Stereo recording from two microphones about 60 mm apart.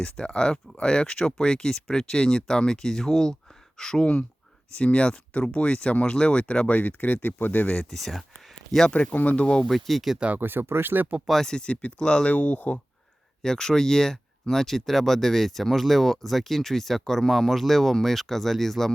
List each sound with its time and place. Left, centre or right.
0.0 s speech: centre
4.0 s speech: centre
7.9 s speech: centre
8.9 s speech: left
9.6 s speech: centre
10.2 s speech: right
10.4 s speech: right
11.3 s speech: centre; by 12.8 s left
13.4 s speech: centre